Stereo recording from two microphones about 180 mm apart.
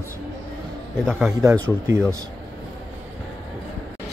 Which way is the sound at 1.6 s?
15° right (ahead or behind).